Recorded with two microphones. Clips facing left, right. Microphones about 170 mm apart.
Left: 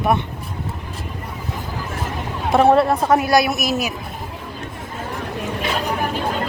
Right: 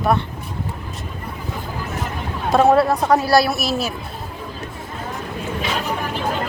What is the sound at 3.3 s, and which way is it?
Speech, 20° left (ahead or behind).